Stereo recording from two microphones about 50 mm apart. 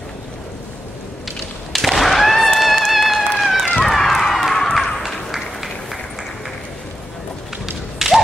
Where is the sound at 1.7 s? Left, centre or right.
Centre.